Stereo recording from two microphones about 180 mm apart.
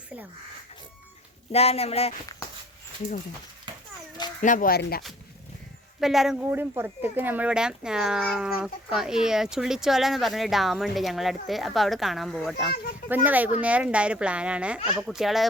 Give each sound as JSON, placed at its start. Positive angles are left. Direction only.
{"t": 1.5, "sound": "speech", "side_deg": 35}
{"t": 3.7, "sound": "a sound", "side_deg": -25}
{"t": 4.4, "sound": "speech", "side_deg": 45}
{"t": 6.0, "sound": "speech", "side_deg": 0}
{"t": 6.4, "sound": "speech", "side_deg": -15}